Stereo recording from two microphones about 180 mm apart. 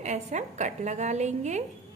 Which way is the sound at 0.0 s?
40° right (ahead or behind).